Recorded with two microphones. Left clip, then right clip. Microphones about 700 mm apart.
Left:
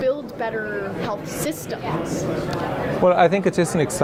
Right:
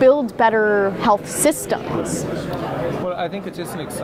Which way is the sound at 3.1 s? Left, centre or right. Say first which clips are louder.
Left 9 dB; left.